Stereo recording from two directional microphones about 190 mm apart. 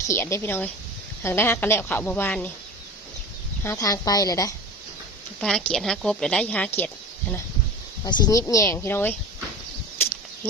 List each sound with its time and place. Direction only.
0.1 s a woman's voice: 15° left (ahead or behind)
3.6 s a woman's voice: 15° left (ahead or behind)
5.4 s a woman's voice: 5° left (ahead or behind)
8.0 s a woman's voice: 20° left (ahead or behind)